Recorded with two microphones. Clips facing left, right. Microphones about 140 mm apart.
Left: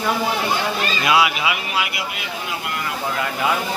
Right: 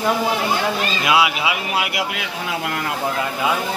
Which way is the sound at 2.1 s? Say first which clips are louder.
Right 3 dB; 90° right.